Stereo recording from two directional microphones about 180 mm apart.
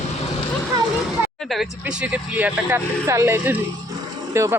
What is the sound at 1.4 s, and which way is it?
Speech, centre (ahead or behind).